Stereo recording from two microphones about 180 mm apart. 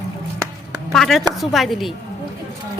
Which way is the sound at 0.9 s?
Centre (ahead or behind).